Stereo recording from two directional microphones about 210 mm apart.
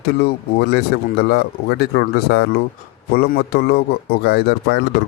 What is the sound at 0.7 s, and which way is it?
Speech, 50° left (ahead or behind).